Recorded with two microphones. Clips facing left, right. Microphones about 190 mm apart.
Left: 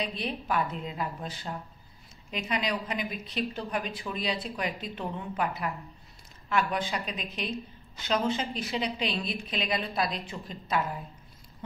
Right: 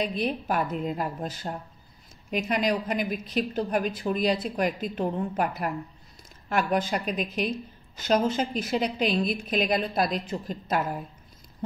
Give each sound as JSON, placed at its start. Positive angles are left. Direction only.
{"t": 0.0, "sound": "a woman's voice", "side_deg": -45}